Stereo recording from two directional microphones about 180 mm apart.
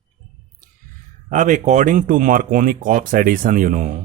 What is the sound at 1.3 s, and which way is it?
Speech, 45° right (ahead or behind).